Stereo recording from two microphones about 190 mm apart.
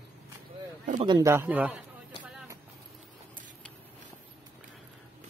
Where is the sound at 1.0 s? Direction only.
25° right (ahead or behind).